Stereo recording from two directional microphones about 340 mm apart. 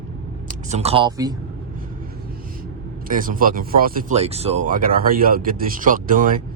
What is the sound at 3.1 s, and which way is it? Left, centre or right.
Speech, right.